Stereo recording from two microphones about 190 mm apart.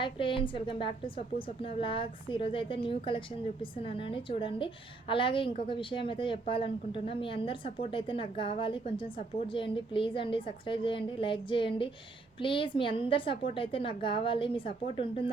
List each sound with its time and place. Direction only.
0.0 s a woman's voice: 25° left (ahead or behind)